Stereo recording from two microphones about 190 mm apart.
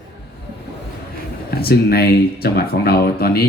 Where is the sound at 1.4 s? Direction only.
55° left (ahead or behind).